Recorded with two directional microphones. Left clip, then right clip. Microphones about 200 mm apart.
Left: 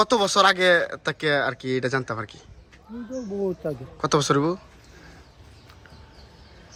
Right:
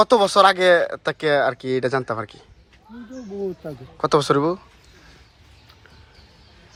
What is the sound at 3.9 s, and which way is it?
Speech, 5° left (ahead or behind).